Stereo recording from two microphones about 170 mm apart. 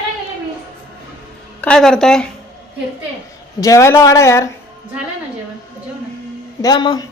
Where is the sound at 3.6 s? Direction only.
20° left (ahead or behind).